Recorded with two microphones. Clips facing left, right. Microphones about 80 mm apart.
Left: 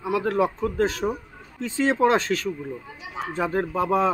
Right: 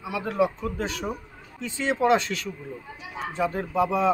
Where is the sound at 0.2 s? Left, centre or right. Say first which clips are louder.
Right 2 dB; left.